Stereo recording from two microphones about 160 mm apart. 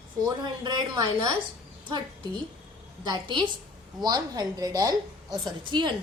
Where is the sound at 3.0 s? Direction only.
30° right (ahead or behind).